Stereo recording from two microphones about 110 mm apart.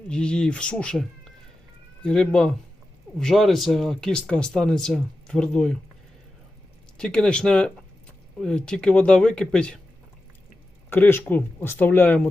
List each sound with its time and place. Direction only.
0.1 s speech: 10° left (ahead or behind)
6.9 s speech: 5° left (ahead or behind)
10.8 s speech: 20° left (ahead or behind)